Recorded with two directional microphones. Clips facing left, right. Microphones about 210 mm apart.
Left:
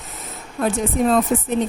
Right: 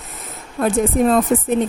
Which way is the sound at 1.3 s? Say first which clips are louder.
Right 3 dB; 55° right (ahead or behind).